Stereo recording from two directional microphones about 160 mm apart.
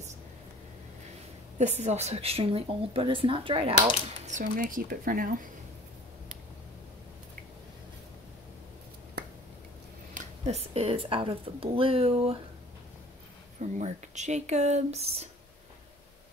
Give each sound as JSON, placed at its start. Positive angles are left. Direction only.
{"t": 1.6, "sound": "a woman's voice", "side_deg": -45}
{"t": 4.4, "sound": "speech", "side_deg": -60}
{"t": 10.1, "sound": "a woman's voice", "side_deg": -40}
{"t": 13.6, "sound": "speech", "side_deg": -45}